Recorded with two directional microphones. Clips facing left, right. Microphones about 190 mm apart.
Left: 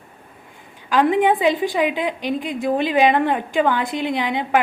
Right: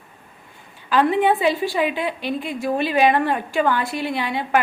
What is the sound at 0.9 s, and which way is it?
A woman's voice, 15° left (ahead or behind).